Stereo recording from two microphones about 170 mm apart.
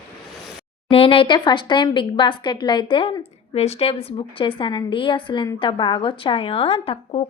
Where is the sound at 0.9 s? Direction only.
35° left (ahead or behind).